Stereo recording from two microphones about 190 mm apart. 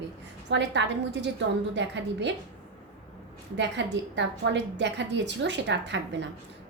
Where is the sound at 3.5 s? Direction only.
70° right (ahead or behind).